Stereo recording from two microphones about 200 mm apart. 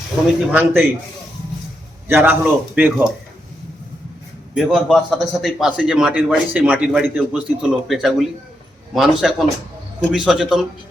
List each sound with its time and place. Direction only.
0.5 s speech: 10° right (ahead or behind)
2.0 s speech: 10° right (ahead or behind)
4.5 s a man's voice: centre (ahead or behind)